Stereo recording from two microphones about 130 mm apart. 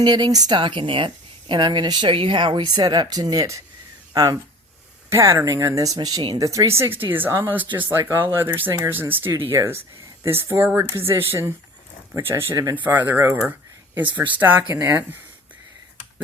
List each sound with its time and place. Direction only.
0.0 s speech: 35° right (ahead or behind)